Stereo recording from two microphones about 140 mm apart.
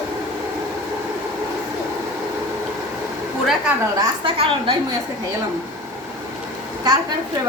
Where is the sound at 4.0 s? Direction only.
40° right (ahead or behind).